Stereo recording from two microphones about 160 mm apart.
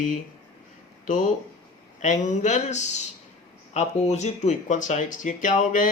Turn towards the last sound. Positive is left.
turn(degrees=50)  # may be behind; listen again after turning